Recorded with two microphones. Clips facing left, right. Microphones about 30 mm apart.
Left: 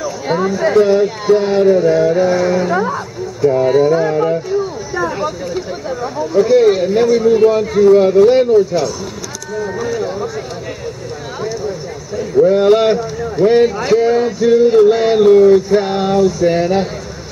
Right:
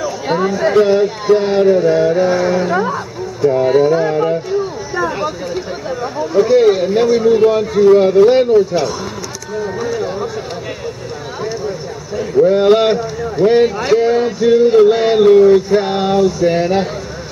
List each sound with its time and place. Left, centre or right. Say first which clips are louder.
0.0 s speech: right 1 dB; centre
7.8 s speech: even; centre
8.2 s speech: even; centre
9.6 s a sound: even; centre
12.4 s speech: even; centre